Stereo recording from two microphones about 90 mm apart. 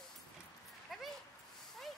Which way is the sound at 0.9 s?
Centre (ahead or behind).